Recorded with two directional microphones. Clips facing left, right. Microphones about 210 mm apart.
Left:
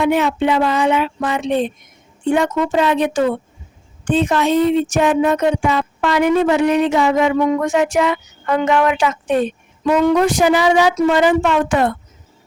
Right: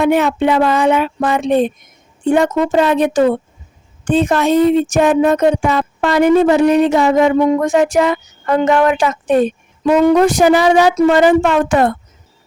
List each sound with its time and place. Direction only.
0.0 s speech: 50° right (ahead or behind)